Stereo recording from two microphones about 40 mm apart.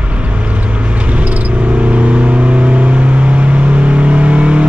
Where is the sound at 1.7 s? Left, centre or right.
Right.